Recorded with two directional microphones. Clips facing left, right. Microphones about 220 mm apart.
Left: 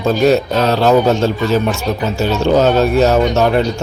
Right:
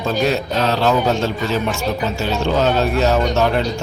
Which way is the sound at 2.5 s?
45° left (ahead or behind).